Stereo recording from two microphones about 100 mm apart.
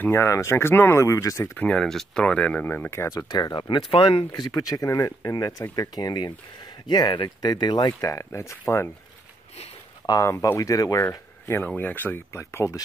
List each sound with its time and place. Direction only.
0.0 s speech: 25° left (ahead or behind)
1.5 s speech: 15° left (ahead or behind); by 4.3 s 65° left (ahead or behind)
4.3 s speech: 40° left (ahead or behind)
8.1 s speech: 30° left (ahead or behind)
10.2 s speech: 30° left (ahead or behind)